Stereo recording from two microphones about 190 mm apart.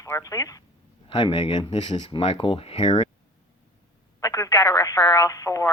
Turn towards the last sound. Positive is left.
turn(degrees=15)  # may be behind; listen again after turning